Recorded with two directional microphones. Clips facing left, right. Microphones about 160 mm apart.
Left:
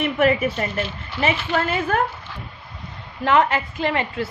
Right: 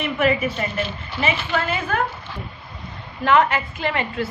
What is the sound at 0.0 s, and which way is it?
Speech, 50° left (ahead or behind).